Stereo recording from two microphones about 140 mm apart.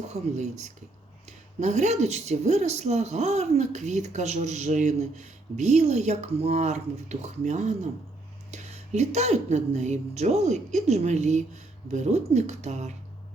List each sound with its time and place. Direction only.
0.1 s speech: 55° right (ahead or behind)